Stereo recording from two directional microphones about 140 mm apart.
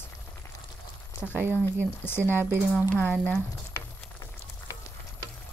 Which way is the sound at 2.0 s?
15° left (ahead or behind).